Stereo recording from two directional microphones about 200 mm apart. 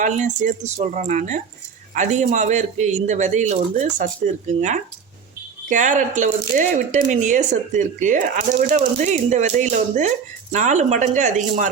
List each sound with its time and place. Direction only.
0.0 s speech: 40° right (ahead or behind)